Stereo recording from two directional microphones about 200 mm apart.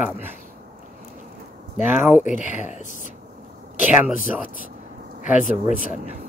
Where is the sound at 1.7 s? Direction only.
10° right (ahead or behind).